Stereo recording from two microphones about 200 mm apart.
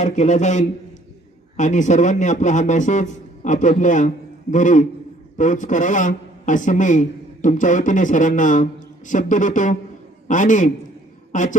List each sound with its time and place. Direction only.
0.0 s a man's voice: 35° left (ahead or behind)